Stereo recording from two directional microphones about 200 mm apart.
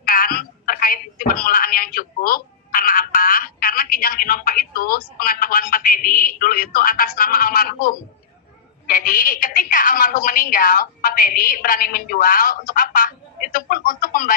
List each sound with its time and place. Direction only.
0.0 s telephone: 45° left (ahead or behind)
8.8 s a woman's voice: 45° left (ahead or behind)